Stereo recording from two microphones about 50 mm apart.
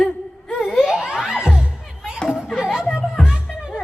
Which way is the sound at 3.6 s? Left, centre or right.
Centre.